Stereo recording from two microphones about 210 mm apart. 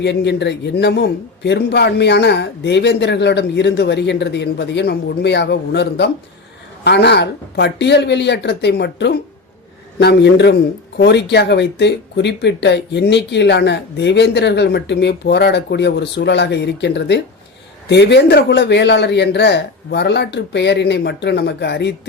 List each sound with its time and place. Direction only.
0.0 s speech: 55° left (ahead or behind)